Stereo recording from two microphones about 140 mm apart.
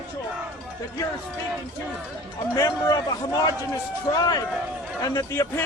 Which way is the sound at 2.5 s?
25° left (ahead or behind).